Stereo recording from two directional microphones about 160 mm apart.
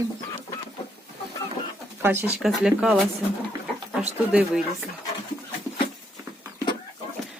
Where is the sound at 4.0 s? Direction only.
5° right (ahead or behind).